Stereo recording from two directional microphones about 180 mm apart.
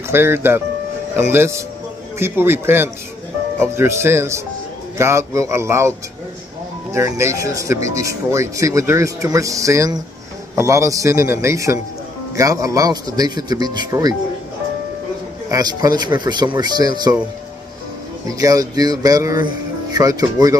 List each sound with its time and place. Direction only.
0.1 s speech: 15° right (ahead or behind)
15.5 s speech: 20° right (ahead or behind)
18.4 s speech: 20° right (ahead or behind)